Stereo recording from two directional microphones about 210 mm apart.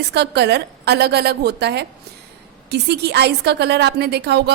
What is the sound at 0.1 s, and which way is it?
A woman's voice, 55° right (ahead or behind).